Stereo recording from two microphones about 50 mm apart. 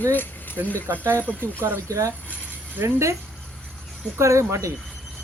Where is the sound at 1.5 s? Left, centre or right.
Right.